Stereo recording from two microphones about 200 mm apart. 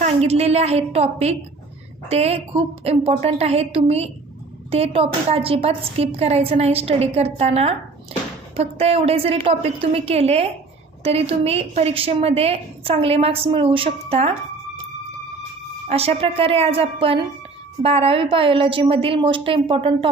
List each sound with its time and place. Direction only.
0.0 s a woman's voice: 30° right (ahead or behind)
15.9 s a woman's voice: 30° right (ahead or behind)